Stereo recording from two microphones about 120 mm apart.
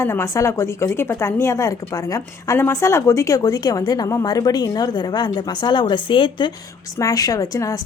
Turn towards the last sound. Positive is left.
turn(degrees=30)  # may be behind; listen again after turning